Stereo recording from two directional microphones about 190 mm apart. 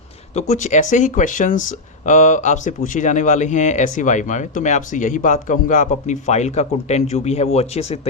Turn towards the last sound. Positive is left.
turn(degrees=35)  # may be behind; listen again after turning